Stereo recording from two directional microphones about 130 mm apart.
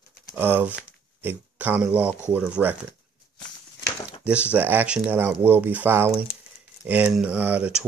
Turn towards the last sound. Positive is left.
turn(degrees=-10)  # may be behind; listen again after turning